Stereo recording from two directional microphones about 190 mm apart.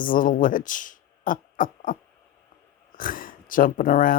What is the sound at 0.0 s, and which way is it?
Speech, 45° left (ahead or behind).